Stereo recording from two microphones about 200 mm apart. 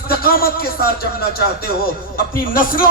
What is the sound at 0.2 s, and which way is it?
Speech, 50° left (ahead or behind).